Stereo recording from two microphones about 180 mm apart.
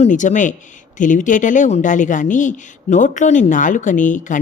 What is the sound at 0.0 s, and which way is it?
Speech, 45° left (ahead or behind).